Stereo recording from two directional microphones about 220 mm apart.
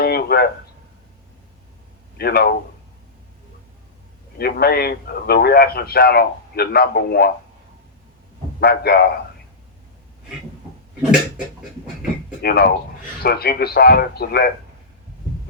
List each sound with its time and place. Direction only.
0.0 s a sound: 45° left (ahead or behind)
2.1 s a man's voice: 45° left (ahead or behind)
4.4 s a man's voice: 45° left (ahead or behind)
8.6 s a man's voice: 45° left (ahead or behind)
12.4 s a man's voice: 45° left (ahead or behind)